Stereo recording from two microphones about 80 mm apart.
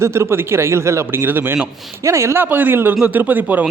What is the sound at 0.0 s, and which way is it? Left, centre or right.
Speech, right.